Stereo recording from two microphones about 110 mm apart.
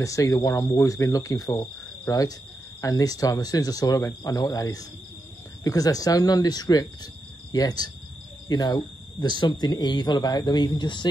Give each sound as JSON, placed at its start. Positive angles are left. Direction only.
{"t": 0.0, "sound": "speech", "side_deg": 30}